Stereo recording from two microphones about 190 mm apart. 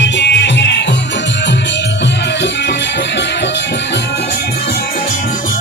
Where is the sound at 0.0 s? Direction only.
65° left (ahead or behind).